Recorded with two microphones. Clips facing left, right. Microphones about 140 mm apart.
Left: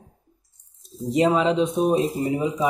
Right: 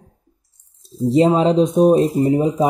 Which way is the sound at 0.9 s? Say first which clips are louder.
Right 5 dB; 30° right (ahead or behind).